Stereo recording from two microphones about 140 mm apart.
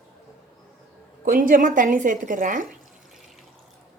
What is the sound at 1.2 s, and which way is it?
A woman's voice, 80° right.